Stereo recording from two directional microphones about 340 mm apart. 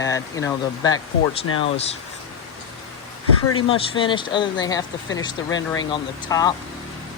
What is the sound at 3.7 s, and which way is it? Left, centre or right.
Speech, centre.